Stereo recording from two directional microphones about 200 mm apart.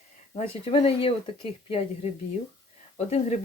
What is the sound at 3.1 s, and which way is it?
Speech, 30° left (ahead or behind).